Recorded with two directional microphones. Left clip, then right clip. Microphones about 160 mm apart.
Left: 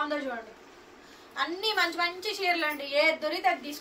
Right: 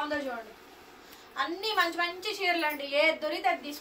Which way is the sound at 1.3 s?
10° left (ahead or behind).